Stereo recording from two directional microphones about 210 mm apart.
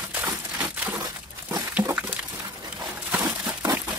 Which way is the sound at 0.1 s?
10° right (ahead or behind).